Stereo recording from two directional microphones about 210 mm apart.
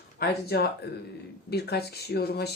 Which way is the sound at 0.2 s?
50° left (ahead or behind).